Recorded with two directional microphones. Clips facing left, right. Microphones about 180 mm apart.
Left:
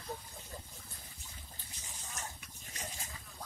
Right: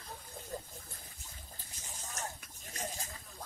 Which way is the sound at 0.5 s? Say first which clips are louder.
Right 7 dB; 45° right (ahead or behind).